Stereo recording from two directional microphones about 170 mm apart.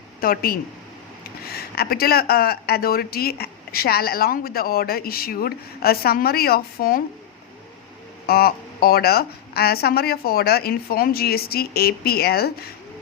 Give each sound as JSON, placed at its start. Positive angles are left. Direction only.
{"t": 0.2, "sound": "speech", "side_deg": 60}
{"t": 8.3, "sound": "speech", "side_deg": 65}